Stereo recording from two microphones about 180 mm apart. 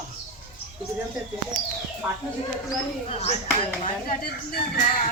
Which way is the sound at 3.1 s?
35° left (ahead or behind).